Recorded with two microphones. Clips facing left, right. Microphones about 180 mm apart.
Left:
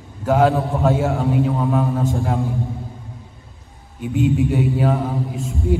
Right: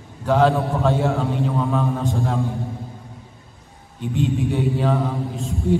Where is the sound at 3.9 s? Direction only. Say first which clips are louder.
Left 4 dB; 5° left (ahead or behind).